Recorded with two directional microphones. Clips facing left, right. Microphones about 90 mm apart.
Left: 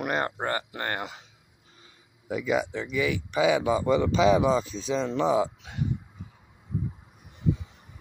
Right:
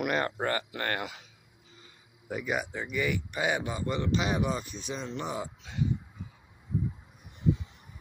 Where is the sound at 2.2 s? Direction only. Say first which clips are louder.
Left 6 dB; 90° left.